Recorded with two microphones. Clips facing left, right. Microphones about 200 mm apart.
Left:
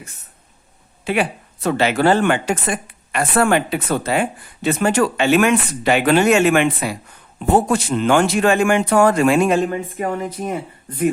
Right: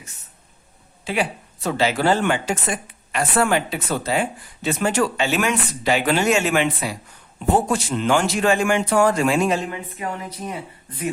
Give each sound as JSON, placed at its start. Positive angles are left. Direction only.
{"t": 1.0, "sound": "speech", "side_deg": 60}